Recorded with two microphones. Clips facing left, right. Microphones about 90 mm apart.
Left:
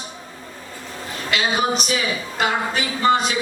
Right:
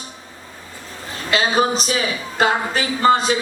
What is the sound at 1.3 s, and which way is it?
A woman's voice, 35° right (ahead or behind).